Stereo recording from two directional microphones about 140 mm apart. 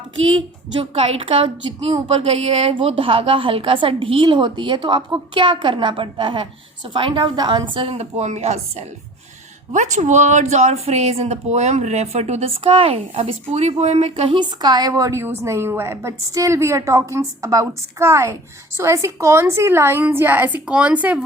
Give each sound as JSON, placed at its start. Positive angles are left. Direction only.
{"t": 0.3, "sound": "a woman's voice", "side_deg": -45}
{"t": 8.2, "sound": "speech", "side_deg": -50}
{"t": 14.3, "sound": "a woman's voice", "side_deg": -30}